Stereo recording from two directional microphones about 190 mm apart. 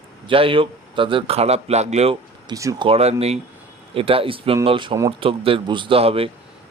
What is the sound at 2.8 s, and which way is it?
Speech, 30° right (ahead or behind).